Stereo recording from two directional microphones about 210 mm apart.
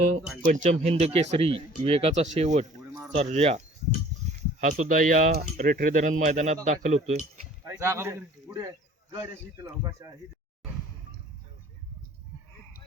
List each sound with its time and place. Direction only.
0.4 s speech: 35° right (ahead or behind)
7.6 s a man's voice: 15° right (ahead or behind)